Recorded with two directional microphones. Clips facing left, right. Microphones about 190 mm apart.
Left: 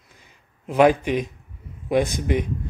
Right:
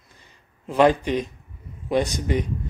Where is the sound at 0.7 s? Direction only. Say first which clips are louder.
Left 1 dB; 10° left (ahead or behind).